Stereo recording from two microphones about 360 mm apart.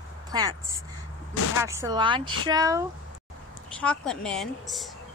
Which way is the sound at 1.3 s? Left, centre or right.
Left.